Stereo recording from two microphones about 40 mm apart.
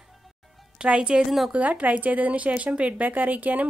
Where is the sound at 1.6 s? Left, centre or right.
Right.